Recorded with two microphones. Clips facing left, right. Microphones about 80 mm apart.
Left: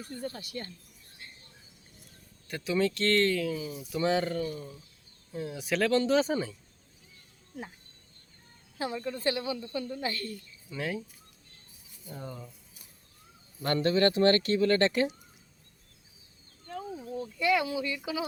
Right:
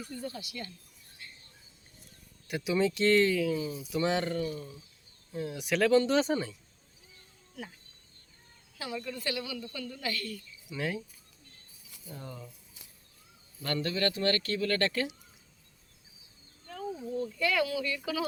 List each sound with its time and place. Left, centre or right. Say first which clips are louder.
0.0 s speech: left 1 dB; left
1.2 s a sound: even; left
2.5 s speech: even; centre
4.4 s speech: even; centre
5.3 s speech: even; centre
7.5 s speech: left 2 dB; left
8.8 s speech: left 5 dB; left
10.8 s speech: even; centre
12.0 s speech: left 2 dB; centre
13.6 s speech: left 6 dB; left
16.7 s speech: right 2 dB; centre